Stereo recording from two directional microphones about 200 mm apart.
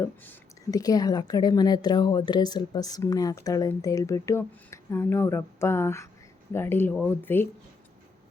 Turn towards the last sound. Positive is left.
turn(degrees=10)  # may be behind; listen again after turning